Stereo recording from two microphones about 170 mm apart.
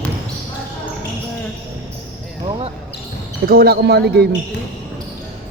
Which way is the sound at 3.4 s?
65° right (ahead or behind).